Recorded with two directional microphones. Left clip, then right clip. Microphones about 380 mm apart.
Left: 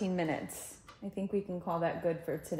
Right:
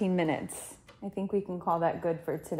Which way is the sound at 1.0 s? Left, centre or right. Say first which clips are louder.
Right 4 dB; right.